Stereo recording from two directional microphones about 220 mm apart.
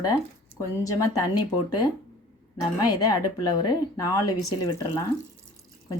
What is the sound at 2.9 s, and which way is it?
Speech, 15° left (ahead or behind).